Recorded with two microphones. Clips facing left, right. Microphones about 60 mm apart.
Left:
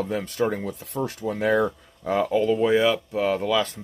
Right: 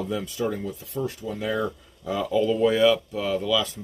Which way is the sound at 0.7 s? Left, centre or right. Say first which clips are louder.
Left 1 dB; left.